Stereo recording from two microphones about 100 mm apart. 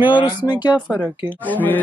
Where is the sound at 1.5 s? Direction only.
15° left (ahead or behind).